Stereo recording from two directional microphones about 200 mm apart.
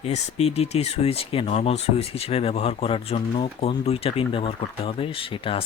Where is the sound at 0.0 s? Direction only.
30° left (ahead or behind).